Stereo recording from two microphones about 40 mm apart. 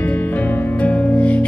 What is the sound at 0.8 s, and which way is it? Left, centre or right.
Music, left.